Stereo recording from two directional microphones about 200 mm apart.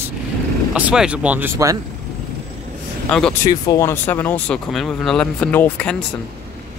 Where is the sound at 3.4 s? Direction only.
15° left (ahead or behind).